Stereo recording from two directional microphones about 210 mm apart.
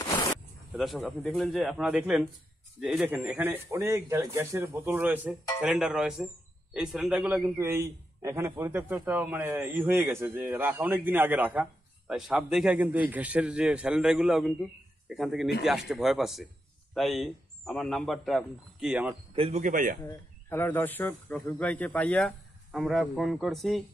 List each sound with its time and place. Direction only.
0.7 s a man's voice: centre (ahead or behind)
19.3 s speech: 30° right (ahead or behind)
20.0 s speech: 10° left (ahead or behind)